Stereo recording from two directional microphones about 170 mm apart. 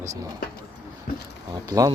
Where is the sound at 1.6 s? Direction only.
20° right (ahead or behind).